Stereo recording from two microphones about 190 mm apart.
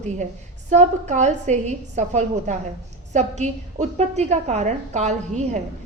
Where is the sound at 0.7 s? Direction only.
35° right (ahead or behind).